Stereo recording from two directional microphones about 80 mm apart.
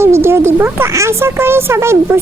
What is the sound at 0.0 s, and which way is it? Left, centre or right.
Speech, right.